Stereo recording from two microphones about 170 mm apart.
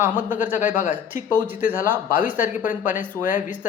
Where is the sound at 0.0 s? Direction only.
10° right (ahead or behind).